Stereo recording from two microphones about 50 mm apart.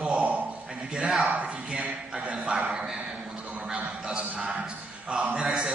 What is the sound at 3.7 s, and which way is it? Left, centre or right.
Music, right.